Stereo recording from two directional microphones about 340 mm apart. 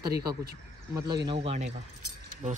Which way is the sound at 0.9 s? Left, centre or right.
Centre.